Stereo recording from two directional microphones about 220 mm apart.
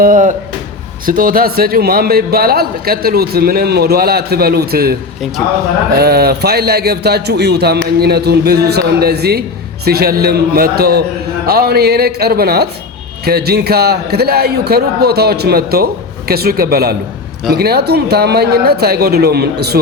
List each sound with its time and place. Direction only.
0.0 s a man's voice: 35° right (ahead or behind)
6.0 s a man's voice: 45° right (ahead or behind)